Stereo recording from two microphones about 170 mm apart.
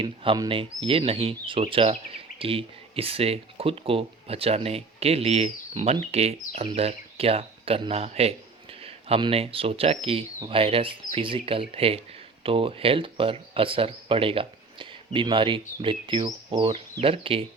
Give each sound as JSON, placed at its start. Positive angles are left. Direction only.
{"t": 0.0, "sound": "speech", "side_deg": -30}